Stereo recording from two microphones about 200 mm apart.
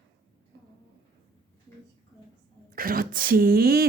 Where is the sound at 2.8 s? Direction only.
45° right (ahead or behind).